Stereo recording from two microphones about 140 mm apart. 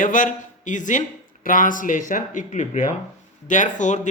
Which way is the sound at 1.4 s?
75° left (ahead or behind).